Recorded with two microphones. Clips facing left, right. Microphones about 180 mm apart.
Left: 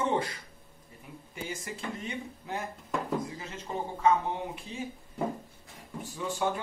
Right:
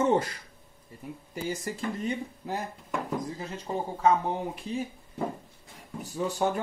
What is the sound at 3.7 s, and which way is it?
Speech, 30° right (ahead or behind).